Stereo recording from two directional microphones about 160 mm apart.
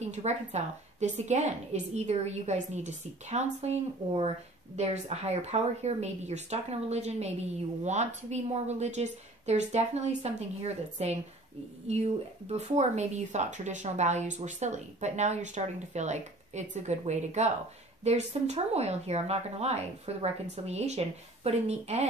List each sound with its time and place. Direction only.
0.0 s speech: 45° right (ahead or behind)